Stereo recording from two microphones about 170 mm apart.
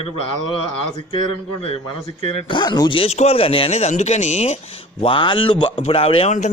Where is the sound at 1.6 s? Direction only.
35° left (ahead or behind).